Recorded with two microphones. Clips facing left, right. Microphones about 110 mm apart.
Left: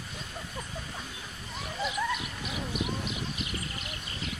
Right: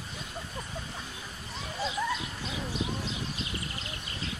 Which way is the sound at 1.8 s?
25° right (ahead or behind).